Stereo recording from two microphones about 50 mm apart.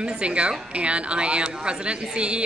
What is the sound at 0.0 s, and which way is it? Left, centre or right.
Speech, right.